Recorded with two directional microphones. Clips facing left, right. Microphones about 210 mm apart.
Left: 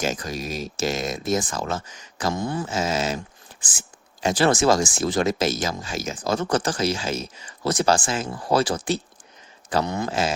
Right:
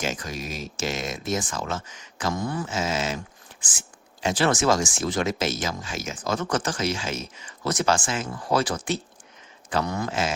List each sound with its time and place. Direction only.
0.0 s speech: 40° left (ahead or behind); by 10.1 s 25° left (ahead or behind)
10.1 s speech: 35° left (ahead or behind)